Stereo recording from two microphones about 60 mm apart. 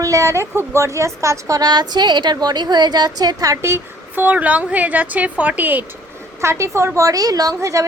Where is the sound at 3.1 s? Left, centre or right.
Right.